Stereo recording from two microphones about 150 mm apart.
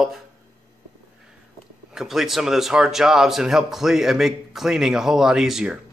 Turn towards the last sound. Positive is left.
turn(degrees=-5)  # may be behind; listen again after turning